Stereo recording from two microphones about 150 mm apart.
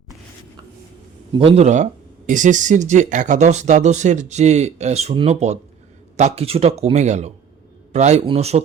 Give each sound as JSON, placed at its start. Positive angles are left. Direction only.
{"t": 1.3, "sound": "speech", "side_deg": -40}